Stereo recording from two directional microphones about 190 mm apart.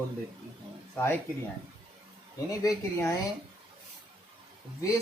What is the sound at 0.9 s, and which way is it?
Speech, 10° left (ahead or behind).